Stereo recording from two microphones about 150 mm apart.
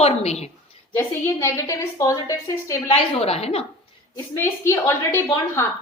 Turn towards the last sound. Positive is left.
turn(degrees=15)  # may be behind; listen again after turning